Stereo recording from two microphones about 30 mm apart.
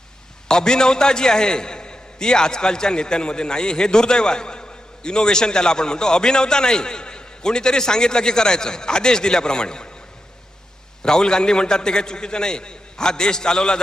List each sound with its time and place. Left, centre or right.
0.4 s a man's voice: left
11.0 s a man's voice: left